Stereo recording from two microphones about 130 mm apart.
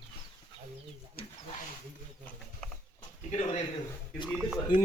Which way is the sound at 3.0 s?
55° left (ahead or behind).